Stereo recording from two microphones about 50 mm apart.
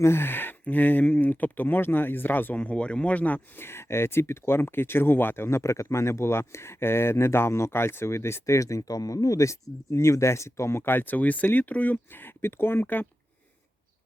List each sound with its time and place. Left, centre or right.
0.0 s speech: left
0.6 s speech: left
2.6 s speech: left
3.6 s speech: left
10.8 s speech: left